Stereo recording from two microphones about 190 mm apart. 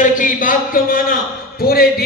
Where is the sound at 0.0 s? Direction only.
45° left (ahead or behind).